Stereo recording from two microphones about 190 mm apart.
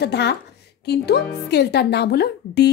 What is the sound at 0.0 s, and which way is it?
Speech, 60° left (ahead or behind).